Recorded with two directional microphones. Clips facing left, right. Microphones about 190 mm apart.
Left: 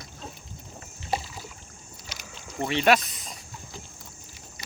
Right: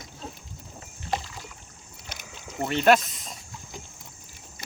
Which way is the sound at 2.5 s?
Centre (ahead or behind).